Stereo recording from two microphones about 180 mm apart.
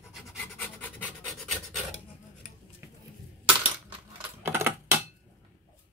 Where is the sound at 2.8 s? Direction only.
15° right (ahead or behind).